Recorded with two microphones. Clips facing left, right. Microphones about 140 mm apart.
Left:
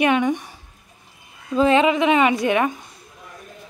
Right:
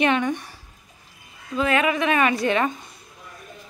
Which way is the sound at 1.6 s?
25° left (ahead or behind).